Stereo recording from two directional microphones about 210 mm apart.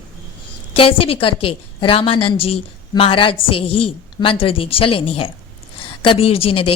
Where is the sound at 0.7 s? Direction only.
25° left (ahead or behind).